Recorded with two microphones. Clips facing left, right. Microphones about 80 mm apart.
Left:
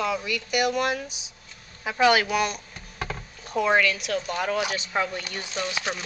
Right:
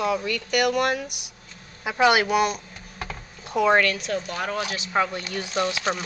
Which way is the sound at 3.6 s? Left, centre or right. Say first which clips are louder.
Right 2 dB; right.